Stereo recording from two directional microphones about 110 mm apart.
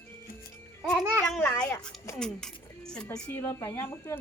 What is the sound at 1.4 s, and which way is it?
Speech, 10° left (ahead or behind).